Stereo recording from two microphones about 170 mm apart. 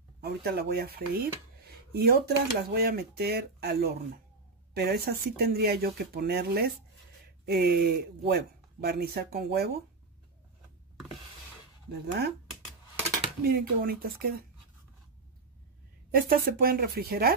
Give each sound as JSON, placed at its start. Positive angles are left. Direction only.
{"t": 0.2, "sound": "speech", "side_deg": -65}
{"t": 13.4, "sound": "speech", "side_deg": -60}
{"t": 16.1, "sound": "speech", "side_deg": -60}